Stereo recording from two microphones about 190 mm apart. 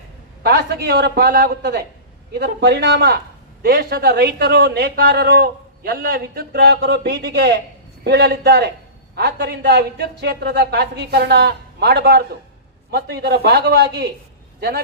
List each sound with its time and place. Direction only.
0.4 s speech: 55° right (ahead or behind)